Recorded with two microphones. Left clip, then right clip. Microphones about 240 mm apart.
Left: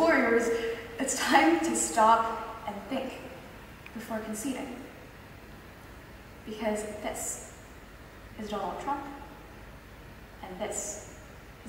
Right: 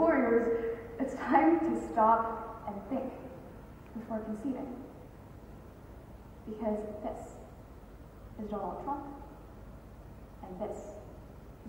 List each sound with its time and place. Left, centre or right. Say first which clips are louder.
0.0 s a sound: left 3 dB; centre
1.9 s a woman's voice: left 4 dB; centre
6.5 s a woman's voice: left 3 dB; centre
8.5 s a woman's voice: left 4 dB; centre
10.4 s a woman's voice: left 4 dB; centre